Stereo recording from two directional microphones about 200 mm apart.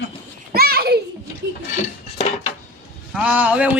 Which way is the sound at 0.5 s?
50° right (ahead or behind).